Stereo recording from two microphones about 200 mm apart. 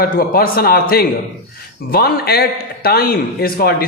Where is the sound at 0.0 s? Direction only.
45° left (ahead or behind).